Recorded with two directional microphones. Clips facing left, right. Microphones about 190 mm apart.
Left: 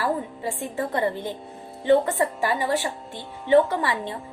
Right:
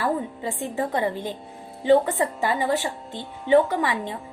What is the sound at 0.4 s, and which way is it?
A woman's voice, 20° right (ahead or behind).